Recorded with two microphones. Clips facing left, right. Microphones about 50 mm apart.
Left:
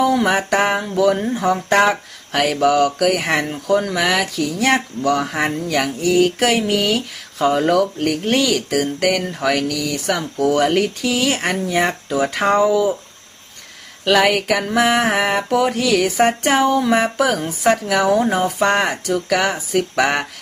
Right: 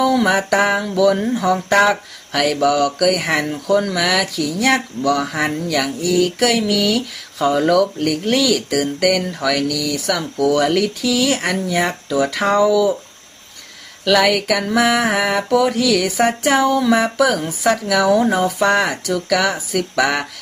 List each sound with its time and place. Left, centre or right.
0.0 s a sound: left
0.7 s music: left
0.9 s speech: left
14.0 s speech: left